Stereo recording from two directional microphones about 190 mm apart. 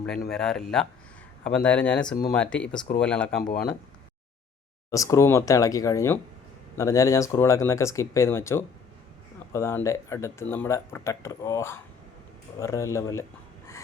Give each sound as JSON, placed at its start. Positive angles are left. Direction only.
{"t": 0.3, "sound": "speech", "side_deg": 5}
{"t": 3.4, "sound": "speech", "side_deg": 45}
{"t": 4.9, "sound": "speech", "side_deg": 15}